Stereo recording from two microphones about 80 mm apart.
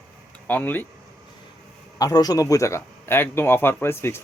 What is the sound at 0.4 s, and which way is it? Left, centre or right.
Speech, left.